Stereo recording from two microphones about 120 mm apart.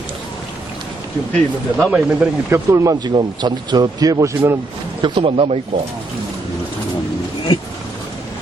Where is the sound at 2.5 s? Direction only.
25° right (ahead or behind).